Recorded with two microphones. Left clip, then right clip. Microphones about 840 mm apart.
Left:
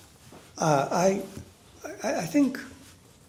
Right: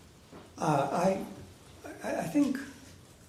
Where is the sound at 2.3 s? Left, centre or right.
Left.